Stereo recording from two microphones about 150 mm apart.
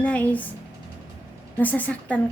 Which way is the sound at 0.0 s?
10° left (ahead or behind).